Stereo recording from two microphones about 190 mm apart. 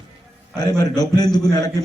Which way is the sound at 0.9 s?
20° left (ahead or behind).